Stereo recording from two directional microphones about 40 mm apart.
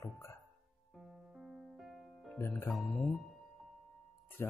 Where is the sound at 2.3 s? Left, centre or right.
Left.